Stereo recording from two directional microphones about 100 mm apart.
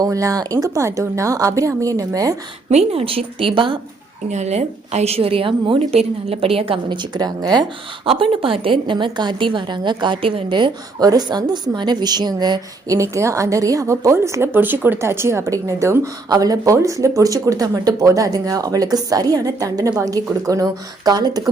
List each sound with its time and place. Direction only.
0.0 s a woman's voice: 35° right (ahead or behind)
2.6 s a woman's voice: 80° right; by 3.8 s 60° right (ahead or behind)
4.4 s a woman's voice: 90° right; by 6.7 s 70° right (ahead or behind)
6.9 s speech: 45° right (ahead or behind)
8.0 s a woman's voice: 65° right (ahead or behind); by 21.5 s 40° right (ahead or behind)